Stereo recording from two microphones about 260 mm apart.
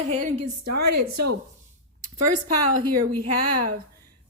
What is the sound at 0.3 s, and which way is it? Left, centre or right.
A woman's voice, right.